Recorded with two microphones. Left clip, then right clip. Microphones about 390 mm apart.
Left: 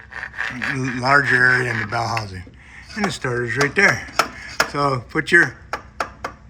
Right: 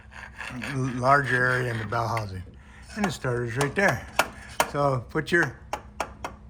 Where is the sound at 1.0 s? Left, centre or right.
Centre.